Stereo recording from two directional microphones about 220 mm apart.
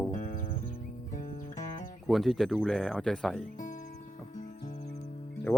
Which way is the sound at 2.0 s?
Centre (ahead or behind).